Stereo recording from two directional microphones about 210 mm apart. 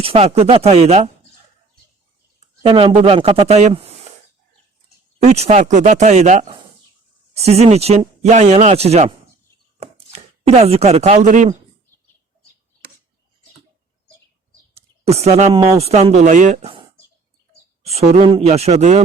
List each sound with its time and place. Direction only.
0.0 s speech: 30° right (ahead or behind)
2.6 s speech: 25° right (ahead or behind)
5.2 s speech: 30° right (ahead or behind)
14.8 s speech: 30° right (ahead or behind)
17.8 s speech: 30° right (ahead or behind)